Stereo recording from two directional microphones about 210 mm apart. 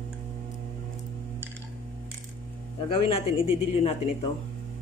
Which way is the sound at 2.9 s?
25° left (ahead or behind).